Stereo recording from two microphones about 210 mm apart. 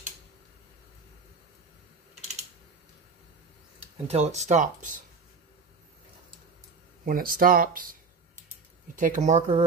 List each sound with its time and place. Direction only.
4.1 s speech: 30° right (ahead or behind)
7.1 s speech: 40° right (ahead or behind)